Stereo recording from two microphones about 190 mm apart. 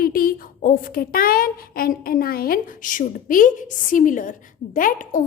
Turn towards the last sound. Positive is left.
turn(degrees=45)  # may be behind; listen again after turning